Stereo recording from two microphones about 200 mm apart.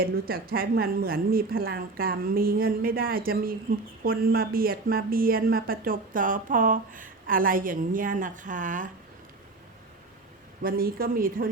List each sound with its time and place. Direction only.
0.0 s speech: 50° right (ahead or behind)
10.6 s speech: 45° right (ahead or behind)